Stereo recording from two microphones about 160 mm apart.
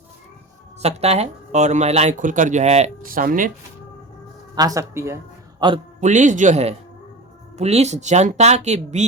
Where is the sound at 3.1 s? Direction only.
60° right (ahead or behind).